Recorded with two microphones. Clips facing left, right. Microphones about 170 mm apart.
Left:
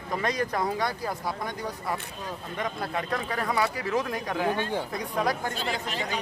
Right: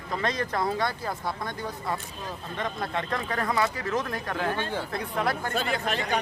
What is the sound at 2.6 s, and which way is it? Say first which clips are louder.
Speech: even; 10° left (ahead or behind).